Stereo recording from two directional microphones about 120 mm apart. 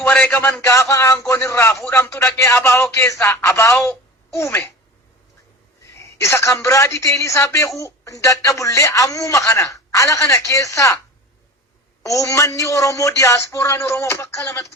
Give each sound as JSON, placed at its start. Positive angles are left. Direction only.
{"t": 0.0, "sound": "speech", "side_deg": 15}
{"t": 5.8, "sound": "a woman's voice", "side_deg": 25}
{"t": 12.0, "sound": "speech", "side_deg": 25}